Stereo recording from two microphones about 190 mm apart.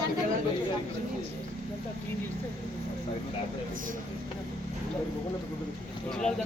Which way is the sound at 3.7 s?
45° right (ahead or behind).